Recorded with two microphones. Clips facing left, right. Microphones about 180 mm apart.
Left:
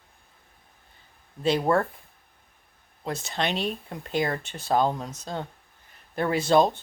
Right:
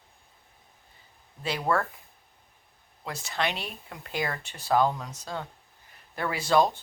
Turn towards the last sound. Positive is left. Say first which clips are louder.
# left 3 dB
turn(degrees=20)  # may be behind; listen again after turning